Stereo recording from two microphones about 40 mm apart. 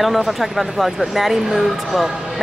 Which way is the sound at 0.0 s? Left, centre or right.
Centre.